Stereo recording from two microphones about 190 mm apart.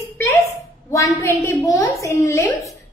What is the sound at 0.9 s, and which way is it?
A woman's voice, 15° left (ahead or behind).